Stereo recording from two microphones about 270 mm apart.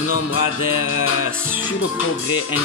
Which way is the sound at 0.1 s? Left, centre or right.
Left.